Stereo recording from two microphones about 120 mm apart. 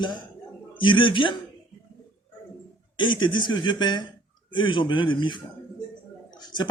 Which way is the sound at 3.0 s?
40° left (ahead or behind).